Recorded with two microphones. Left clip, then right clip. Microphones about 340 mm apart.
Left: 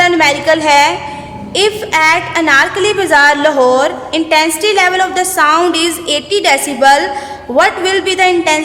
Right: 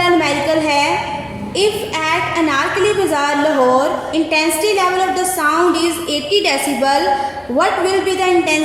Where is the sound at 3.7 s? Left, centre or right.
Left.